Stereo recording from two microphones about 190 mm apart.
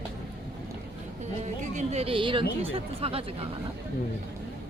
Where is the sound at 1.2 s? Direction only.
35° right (ahead or behind).